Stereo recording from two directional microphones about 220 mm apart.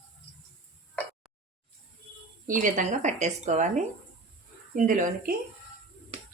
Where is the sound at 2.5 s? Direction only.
35° right (ahead or behind).